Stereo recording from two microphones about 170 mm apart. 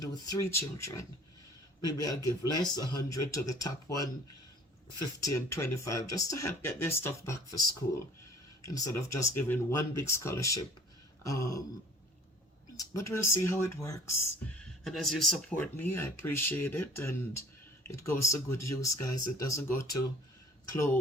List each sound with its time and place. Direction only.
0.0 s speech: 20° left (ahead or behind)
5.2 s speech: 15° left (ahead or behind)
8.6 s speech: 20° left (ahead or behind)
11.2 s a sound: 20° left (ahead or behind)
12.7 s speech: 20° left (ahead or behind)
14.6 s speech: 5° left (ahead or behind)